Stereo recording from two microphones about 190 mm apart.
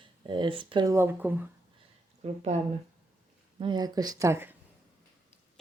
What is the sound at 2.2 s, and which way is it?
Speech, 35° right (ahead or behind).